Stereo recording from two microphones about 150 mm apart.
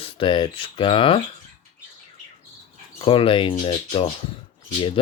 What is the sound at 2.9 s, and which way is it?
Speech, 35° left (ahead or behind).